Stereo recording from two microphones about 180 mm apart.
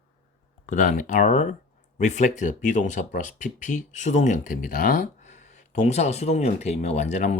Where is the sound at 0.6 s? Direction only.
45° left (ahead or behind).